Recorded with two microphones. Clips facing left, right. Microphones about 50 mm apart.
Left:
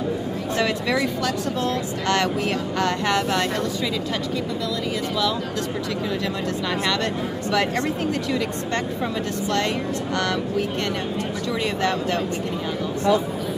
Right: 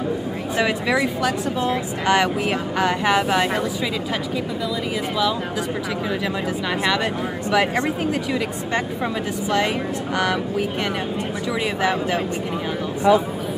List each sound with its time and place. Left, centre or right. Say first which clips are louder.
0.6 s speech: right 2 dB; centre
6.7 s speech: right 3 dB; centre
11.6 s speech: right 2 dB; centre